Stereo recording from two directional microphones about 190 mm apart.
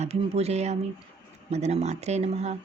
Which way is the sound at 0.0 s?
35° right (ahead or behind).